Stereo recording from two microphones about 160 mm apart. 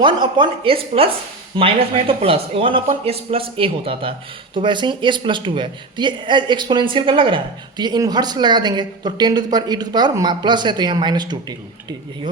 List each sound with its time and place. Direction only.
0.0 s speech: 30° right (ahead or behind)